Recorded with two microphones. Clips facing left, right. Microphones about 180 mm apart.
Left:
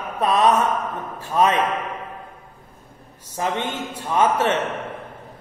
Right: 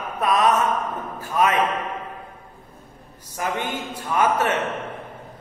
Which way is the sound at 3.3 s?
25° left (ahead or behind).